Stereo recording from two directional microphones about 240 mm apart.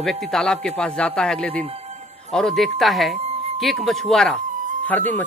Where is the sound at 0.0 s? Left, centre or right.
Centre.